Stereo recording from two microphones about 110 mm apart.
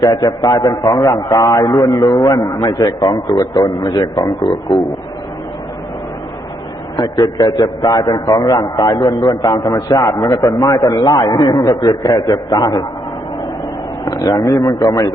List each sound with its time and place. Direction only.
0.0 s a man's voice: 35° left (ahead or behind)
6.9 s a man's voice: 35° left (ahead or behind)
10.5 s a man's voice: 45° left (ahead or behind)
14.0 s a man's voice: 35° left (ahead or behind)